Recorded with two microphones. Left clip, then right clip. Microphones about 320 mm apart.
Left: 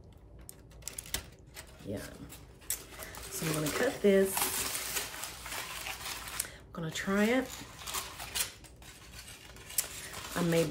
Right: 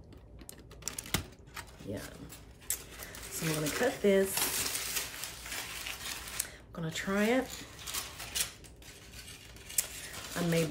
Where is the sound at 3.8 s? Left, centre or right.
Centre.